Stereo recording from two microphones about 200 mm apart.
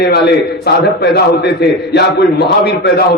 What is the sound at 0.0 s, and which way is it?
Speech, 55° left (ahead or behind).